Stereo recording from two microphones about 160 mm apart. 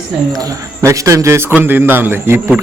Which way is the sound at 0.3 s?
20° right (ahead or behind).